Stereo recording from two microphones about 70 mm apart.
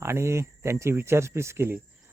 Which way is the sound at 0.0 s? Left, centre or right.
Right.